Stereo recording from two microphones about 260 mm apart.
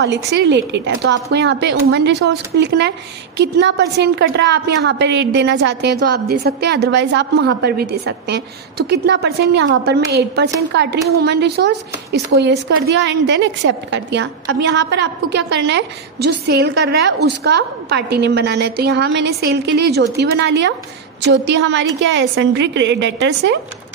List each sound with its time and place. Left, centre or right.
0.0 s a woman's voice: right